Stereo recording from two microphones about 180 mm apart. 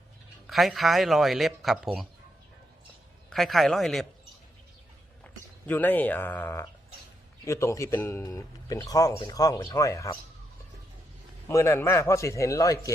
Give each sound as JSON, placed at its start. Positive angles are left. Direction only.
{"t": 0.4, "sound": "speech", "side_deg": 0}
{"t": 3.2, "sound": "speech", "side_deg": 0}
{"t": 5.2, "sound": "speech", "side_deg": 10}
{"t": 11.4, "sound": "speech", "side_deg": 15}